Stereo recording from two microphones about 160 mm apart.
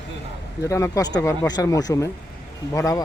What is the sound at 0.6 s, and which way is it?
Speech, 20° left (ahead or behind).